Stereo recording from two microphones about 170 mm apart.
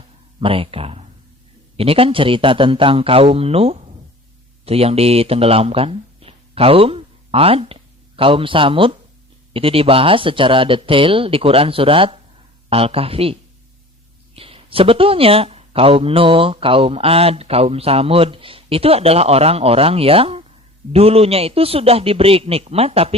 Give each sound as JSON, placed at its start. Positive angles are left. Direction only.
{"t": 0.3, "sound": "speech", "side_deg": -30}
{"t": 14.3, "sound": "speech", "side_deg": -35}